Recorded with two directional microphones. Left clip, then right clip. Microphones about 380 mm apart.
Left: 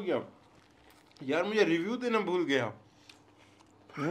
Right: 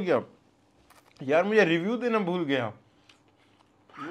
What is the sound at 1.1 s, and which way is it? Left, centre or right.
A man's voice, right.